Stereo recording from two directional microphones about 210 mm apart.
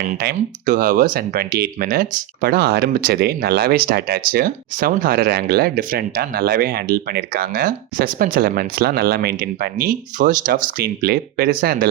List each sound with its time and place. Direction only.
0.2 s speech: 45° right (ahead or behind)